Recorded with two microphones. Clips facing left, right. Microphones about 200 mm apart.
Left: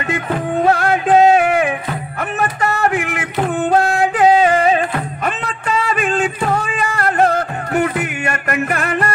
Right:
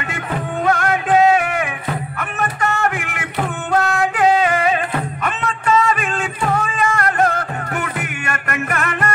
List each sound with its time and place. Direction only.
0.7 s music: 35° left (ahead or behind)